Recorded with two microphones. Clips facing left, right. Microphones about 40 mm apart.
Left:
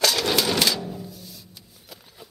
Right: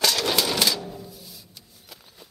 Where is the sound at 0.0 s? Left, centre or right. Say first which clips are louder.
Left 1 dB; centre.